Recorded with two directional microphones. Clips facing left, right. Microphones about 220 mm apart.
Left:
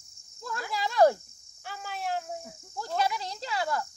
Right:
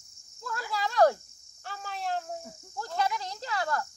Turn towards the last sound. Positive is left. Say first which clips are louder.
# left 1 dB
turn(degrees=10)  # may be behind; listen again after turning